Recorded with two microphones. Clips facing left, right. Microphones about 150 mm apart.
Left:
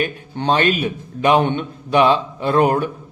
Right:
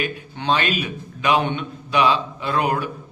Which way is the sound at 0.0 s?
50° left (ahead or behind).